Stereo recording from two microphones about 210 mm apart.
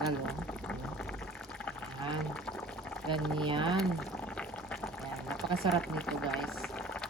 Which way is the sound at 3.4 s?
20° right (ahead or behind).